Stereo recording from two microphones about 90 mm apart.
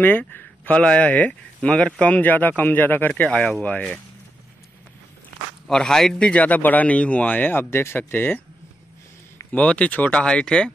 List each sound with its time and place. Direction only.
0.0 s speech: 20° left (ahead or behind)
5.7 s speech: 5° left (ahead or behind)
9.5 s speech: 15° left (ahead or behind)